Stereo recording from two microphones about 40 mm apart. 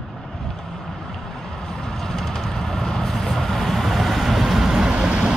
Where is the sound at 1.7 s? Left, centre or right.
Centre.